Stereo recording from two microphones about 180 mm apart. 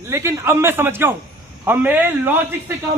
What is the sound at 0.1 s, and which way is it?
A man's voice, 15° right (ahead or behind).